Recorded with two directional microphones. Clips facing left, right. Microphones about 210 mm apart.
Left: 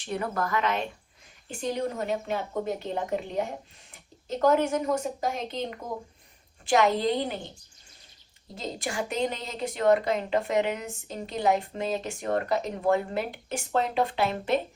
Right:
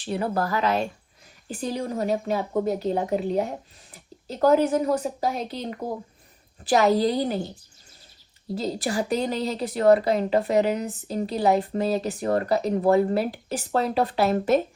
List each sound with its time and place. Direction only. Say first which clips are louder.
0.0 s speech: right 4 dB; 30° right (ahead or behind)
3.9 s a sound: left 2 dB; 35° right (ahead or behind)
4.7 s speech: right 4 dB; 35° right (ahead or behind)
8.5 s speech: right 6 dB; 35° right (ahead or behind)